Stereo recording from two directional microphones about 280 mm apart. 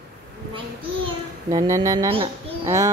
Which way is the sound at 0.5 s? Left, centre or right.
Centre.